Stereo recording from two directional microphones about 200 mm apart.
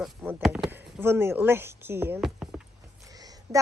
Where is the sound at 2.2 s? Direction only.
Centre (ahead or behind).